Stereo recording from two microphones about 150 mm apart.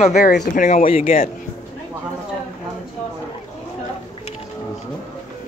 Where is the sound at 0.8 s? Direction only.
40° left (ahead or behind).